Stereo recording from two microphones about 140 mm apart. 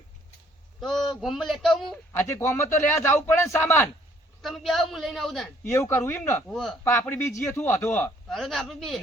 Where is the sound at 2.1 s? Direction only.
15° left (ahead or behind).